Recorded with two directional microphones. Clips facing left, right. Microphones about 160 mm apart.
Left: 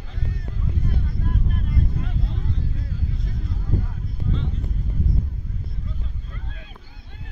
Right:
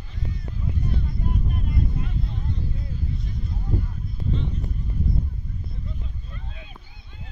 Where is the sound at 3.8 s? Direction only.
90° left.